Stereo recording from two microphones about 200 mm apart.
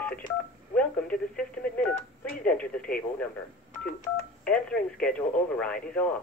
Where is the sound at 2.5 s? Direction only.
5° left (ahead or behind).